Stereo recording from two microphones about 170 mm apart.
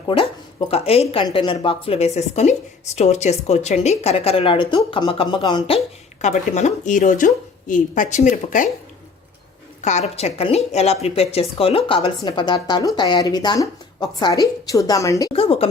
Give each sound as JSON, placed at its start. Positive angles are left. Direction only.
{"t": 0.7, "sound": "a woman's voice", "side_deg": 35}
{"t": 6.2, "sound": "speech", "side_deg": 45}
{"t": 9.8, "sound": "a woman's voice", "side_deg": 40}
{"t": 15.3, "sound": "a woman's voice", "side_deg": 35}